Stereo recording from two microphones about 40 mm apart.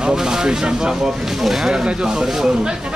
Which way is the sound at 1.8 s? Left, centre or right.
Centre.